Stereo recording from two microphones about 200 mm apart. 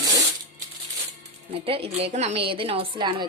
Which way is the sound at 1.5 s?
30° right (ahead or behind).